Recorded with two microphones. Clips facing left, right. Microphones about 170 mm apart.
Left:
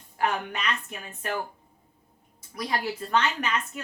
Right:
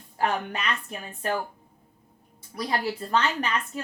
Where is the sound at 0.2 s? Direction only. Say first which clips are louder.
Right 1 dB; 35° right (ahead or behind).